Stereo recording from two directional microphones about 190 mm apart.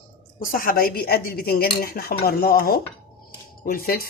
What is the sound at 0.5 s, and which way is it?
Dishes, 50° left (ahead or behind).